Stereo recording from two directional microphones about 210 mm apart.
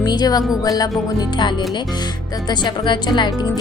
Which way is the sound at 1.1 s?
20° left (ahead or behind).